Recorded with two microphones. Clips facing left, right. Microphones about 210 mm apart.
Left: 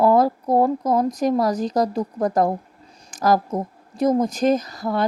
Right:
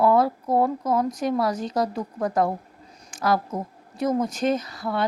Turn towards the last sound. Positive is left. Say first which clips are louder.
# left 3 dB
turn(degrees=40)  # may be behind; listen again after turning